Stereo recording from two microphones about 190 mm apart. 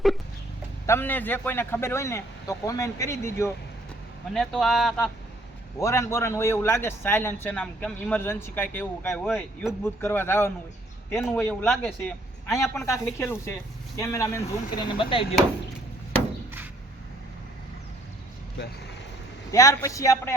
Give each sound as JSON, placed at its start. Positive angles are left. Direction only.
{"t": 0.9, "sound": "a man's voice", "side_deg": 10}
{"t": 4.4, "sound": "a man's voice", "side_deg": 0}
{"t": 5.8, "sound": "a man's voice", "side_deg": 15}
{"t": 11.1, "sound": "a man's voice", "side_deg": 0}
{"t": 12.7, "sound": "a man's voice", "side_deg": 15}
{"t": 14.9, "sound": "speech", "side_deg": 30}
{"t": 19.5, "sound": "a man's voice", "side_deg": 15}